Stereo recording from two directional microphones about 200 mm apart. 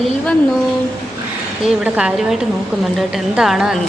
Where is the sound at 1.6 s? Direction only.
5° right (ahead or behind).